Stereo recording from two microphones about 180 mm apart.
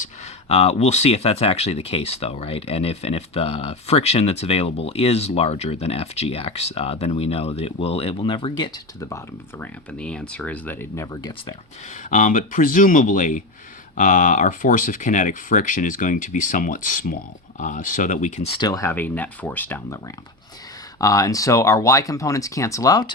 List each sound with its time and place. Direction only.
0.0 s speech: 35° left (ahead or behind); by 9.6 s 15° left (ahead or behind)
10.0 s speech: 5° left (ahead or behind); by 11.5 s 20° left (ahead or behind)
12.1 s speech: 45° left (ahead or behind)
18.5 s speech: 20° left (ahead or behind)
21.0 s speech: 20° left (ahead or behind)